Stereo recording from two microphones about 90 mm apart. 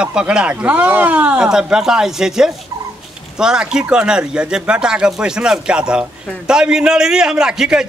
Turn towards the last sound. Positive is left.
turn(degrees=-10)  # may be behind; listen again after turning